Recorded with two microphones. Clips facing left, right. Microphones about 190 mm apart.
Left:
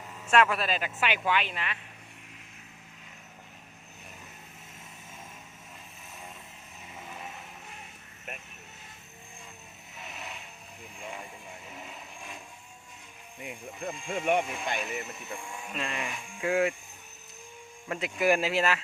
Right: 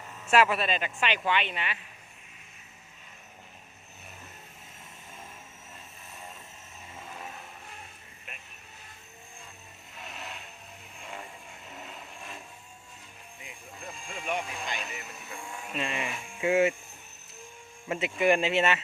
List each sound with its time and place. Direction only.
0.3 s speech: 5° right (ahead or behind)
9.9 s vehicle: centre (ahead or behind)
11.7 s vehicle: centre (ahead or behind)
13.4 s vehicle: 55° left (ahead or behind)
15.4 s speech: centre (ahead or behind)
17.8 s speech: 5° right (ahead or behind)